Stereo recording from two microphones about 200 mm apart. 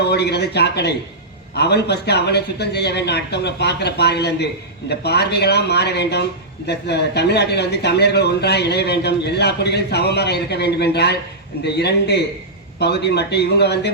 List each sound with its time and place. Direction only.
0.0 s speech: 55° left (ahead or behind)